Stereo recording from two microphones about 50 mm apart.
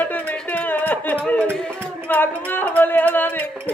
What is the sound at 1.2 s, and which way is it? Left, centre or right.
Speech, left.